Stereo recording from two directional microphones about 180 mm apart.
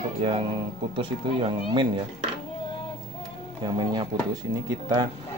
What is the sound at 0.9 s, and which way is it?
Speech, 30° right (ahead or behind).